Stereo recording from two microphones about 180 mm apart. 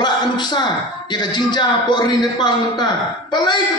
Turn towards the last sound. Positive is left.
turn(degrees=25)  # may be behind; listen again after turning